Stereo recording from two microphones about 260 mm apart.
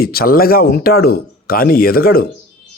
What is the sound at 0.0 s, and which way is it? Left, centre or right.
Speech, left.